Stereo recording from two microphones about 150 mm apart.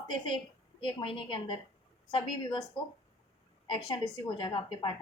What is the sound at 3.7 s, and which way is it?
A woman's voice, 30° left (ahead or behind).